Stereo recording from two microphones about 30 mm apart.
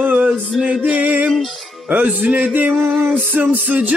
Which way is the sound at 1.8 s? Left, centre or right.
Right.